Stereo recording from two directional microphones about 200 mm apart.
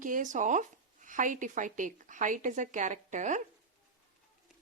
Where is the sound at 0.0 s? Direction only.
40° right (ahead or behind).